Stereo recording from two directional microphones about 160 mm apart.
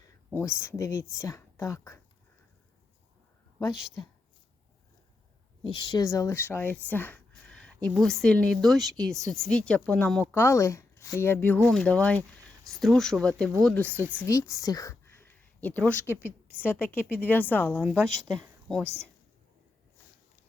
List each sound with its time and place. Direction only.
0.3 s speech: 15° left (ahead or behind)
5.6 s a woman's voice: 30° left (ahead or behind); by 13.9 s 5° left (ahead or behind)
13.9 s speech: 15° right (ahead or behind)
14.2 s speech: 20° left (ahead or behind)
16.0 s a woman's voice: 10° right (ahead or behind)
16.6 s speech: 10° left (ahead or behind)
17.7 s speech: 5° right (ahead or behind)